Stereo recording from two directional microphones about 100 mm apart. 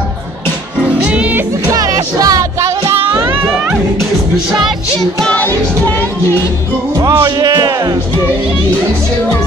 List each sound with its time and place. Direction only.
0.8 s music: 15° right (ahead or behind)
1.7 s music: 35° right (ahead or behind)
5.4 s music: 20° left (ahead or behind)
7.0 s speech: 40° right (ahead or behind)